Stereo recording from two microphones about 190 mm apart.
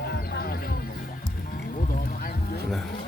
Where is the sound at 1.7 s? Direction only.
45° left (ahead or behind).